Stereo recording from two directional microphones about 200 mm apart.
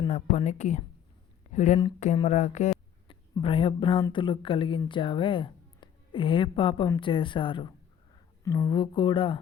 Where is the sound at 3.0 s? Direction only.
25° left (ahead or behind).